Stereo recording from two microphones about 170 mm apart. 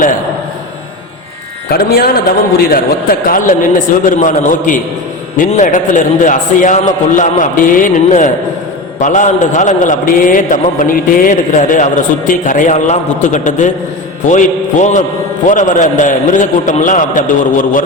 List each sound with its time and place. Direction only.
1.7 s a man's voice: 65° left (ahead or behind)